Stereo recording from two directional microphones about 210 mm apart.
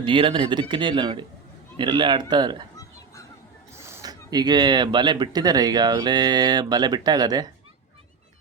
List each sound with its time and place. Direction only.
0.0 s speech: 25° right (ahead or behind)
3.8 s speech: 10° right (ahead or behind)